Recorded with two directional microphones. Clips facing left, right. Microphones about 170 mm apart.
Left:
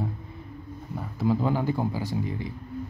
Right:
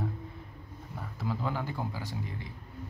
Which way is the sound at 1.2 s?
20° left (ahead or behind).